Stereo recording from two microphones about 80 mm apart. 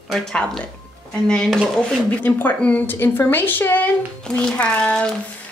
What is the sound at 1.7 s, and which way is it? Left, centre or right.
Speech, centre.